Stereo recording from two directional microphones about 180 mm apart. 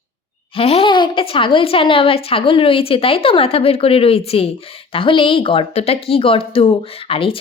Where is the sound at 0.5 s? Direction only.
30° left (ahead or behind).